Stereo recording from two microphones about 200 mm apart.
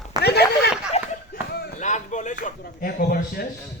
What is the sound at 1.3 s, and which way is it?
Chop, 50° left (ahead or behind).